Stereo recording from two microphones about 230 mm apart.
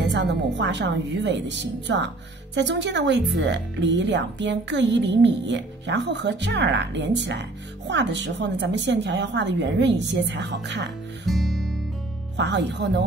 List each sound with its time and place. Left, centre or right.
0.0 s speech: right
11.2 s music: centre
12.4 s speech: right